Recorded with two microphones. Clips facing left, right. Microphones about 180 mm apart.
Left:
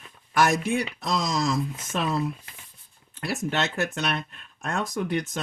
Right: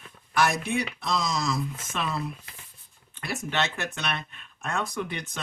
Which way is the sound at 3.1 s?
40° left (ahead or behind).